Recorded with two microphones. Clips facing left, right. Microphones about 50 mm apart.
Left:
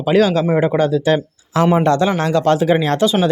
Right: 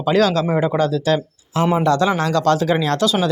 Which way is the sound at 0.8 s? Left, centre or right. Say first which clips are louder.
Left 3 dB; left.